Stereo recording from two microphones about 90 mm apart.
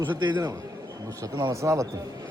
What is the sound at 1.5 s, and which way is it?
Speech, 35° right (ahead or behind).